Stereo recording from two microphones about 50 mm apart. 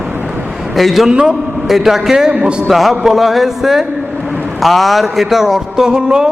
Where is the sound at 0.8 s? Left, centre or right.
Centre.